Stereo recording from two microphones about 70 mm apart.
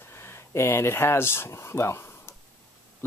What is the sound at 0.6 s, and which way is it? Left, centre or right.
Speech, left.